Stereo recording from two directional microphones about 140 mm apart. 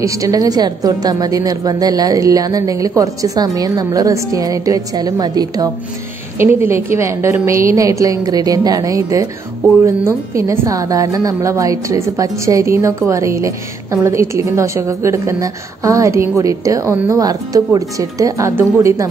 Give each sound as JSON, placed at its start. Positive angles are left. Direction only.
{"t": 0.0, "sound": "a woman's voice", "side_deg": -25}